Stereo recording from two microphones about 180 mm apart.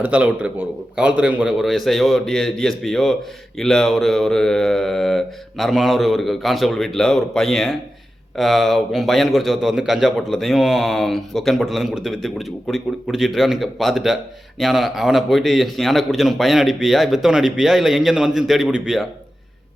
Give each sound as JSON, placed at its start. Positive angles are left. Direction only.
{"t": 0.0, "sound": "a man's voice", "side_deg": -5}